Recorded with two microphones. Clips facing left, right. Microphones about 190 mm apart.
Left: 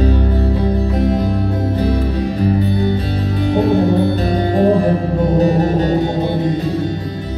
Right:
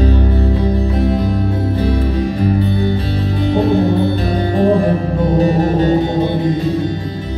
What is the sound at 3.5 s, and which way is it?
Music, 40° left (ahead or behind).